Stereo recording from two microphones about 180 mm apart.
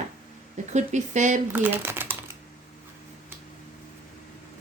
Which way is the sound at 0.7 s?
40° right (ahead or behind).